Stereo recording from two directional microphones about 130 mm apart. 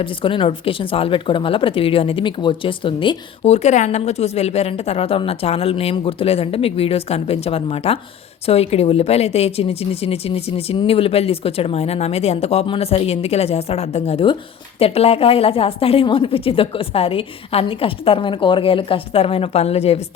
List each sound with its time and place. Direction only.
0.0 s speech: 40° left (ahead or behind)
3.4 s speech: 60° left (ahead or behind)